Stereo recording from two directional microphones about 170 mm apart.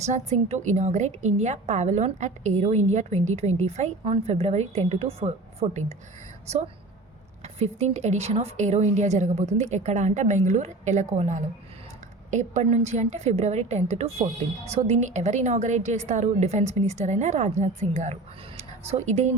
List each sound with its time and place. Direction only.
0.0 s a woman's voice: 40° right (ahead or behind)
7.4 s a woman's voice: 40° right (ahead or behind)